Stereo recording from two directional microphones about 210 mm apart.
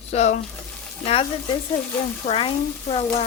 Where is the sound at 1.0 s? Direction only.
25° left (ahead or behind).